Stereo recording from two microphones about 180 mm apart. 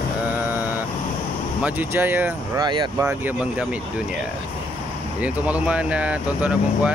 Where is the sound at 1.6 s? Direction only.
10° right (ahead or behind).